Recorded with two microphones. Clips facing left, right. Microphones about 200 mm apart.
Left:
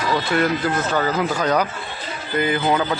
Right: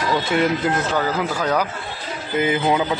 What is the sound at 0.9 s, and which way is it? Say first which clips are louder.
Speech: left 1 dB; 5° right (ahead or behind).